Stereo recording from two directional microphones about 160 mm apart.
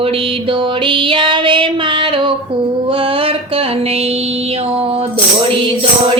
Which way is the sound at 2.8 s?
35° right (ahead or behind).